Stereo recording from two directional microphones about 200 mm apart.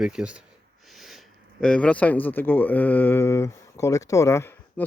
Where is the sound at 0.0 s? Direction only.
5° right (ahead or behind).